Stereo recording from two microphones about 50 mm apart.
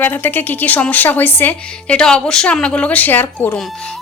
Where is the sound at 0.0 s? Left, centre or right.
Left.